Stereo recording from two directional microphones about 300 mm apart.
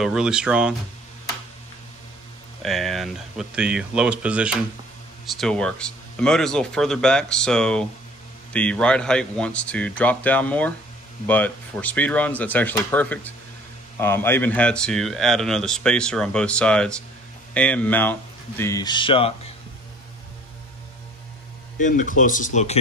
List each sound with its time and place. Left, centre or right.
0.0 s speech: centre
2.6 s speech: centre
21.7 s speech: left